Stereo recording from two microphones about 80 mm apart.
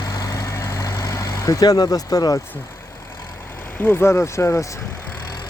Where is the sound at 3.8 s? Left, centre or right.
Left.